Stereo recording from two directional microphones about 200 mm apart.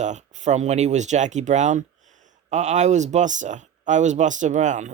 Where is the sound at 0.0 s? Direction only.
35° right (ahead or behind).